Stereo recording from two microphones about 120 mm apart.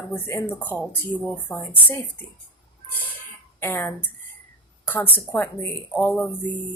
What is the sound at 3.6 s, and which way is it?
Speech, 20° left (ahead or behind).